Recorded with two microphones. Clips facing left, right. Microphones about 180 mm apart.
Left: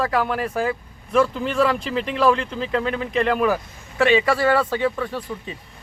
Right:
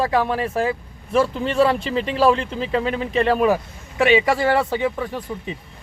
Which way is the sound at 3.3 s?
25° right (ahead or behind).